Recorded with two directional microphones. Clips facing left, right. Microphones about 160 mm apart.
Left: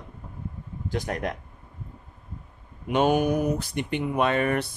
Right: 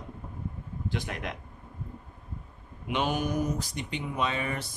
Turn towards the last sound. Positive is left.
turn(degrees=60)  # may be behind; listen again after turning